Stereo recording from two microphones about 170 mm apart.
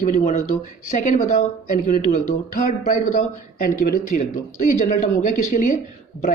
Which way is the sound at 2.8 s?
50° left (ahead or behind).